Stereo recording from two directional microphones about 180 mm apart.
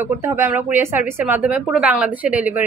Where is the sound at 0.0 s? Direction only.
15° right (ahead or behind).